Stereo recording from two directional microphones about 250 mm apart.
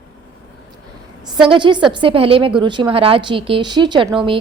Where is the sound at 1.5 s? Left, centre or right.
Centre.